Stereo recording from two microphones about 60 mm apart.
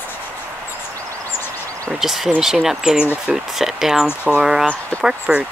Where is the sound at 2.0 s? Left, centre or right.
Centre.